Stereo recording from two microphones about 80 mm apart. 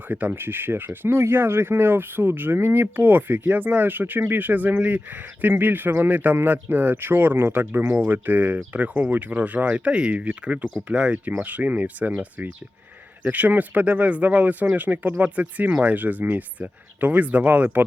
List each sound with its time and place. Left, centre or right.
0.1 s speech: right